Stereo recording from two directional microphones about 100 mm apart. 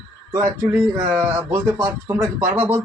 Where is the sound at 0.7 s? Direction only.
15° right (ahead or behind).